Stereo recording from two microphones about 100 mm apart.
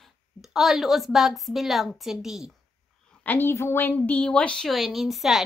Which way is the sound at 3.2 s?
20° left (ahead or behind).